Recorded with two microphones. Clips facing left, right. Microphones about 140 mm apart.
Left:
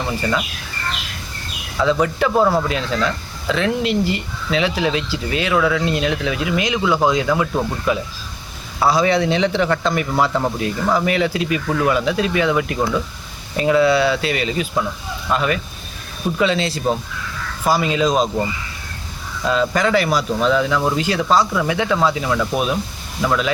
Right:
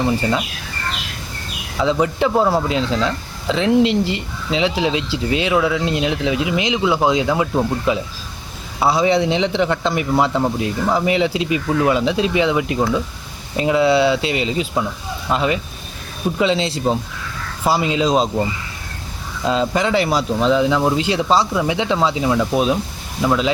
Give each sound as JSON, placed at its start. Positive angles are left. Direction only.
{"t": 0.2, "sound": "speech", "side_deg": -25}
{"t": 1.8, "sound": "speech", "side_deg": -20}
{"t": 19.5, "sound": "speech", "side_deg": -25}